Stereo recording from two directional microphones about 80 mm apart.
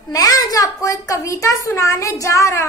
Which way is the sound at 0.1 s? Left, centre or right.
Left.